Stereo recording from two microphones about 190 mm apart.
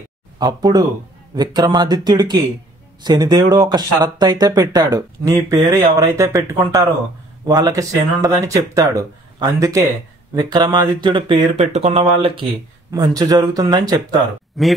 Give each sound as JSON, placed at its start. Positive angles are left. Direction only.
{"t": 0.4, "sound": "speech", "side_deg": -20}
{"t": 14.6, "sound": "speech", "side_deg": 0}